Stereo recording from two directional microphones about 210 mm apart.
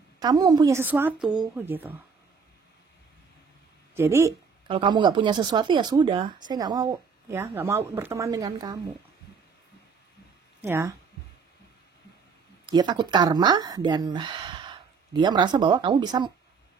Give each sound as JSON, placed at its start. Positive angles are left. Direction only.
{"t": 0.2, "sound": "a woman's voice", "side_deg": -20}
{"t": 3.9, "sound": "a sound", "side_deg": -10}
{"t": 4.7, "sound": "speech", "side_deg": -20}
{"t": 10.6, "sound": "a woman's voice", "side_deg": -10}
{"t": 12.6, "sound": "speech", "side_deg": -20}